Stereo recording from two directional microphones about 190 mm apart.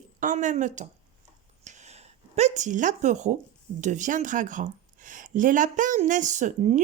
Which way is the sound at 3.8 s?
40° right (ahead or behind).